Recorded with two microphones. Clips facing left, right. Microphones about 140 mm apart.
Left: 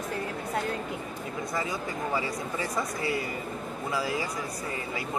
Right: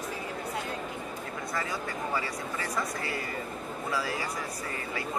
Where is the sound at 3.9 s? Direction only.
15° left (ahead or behind).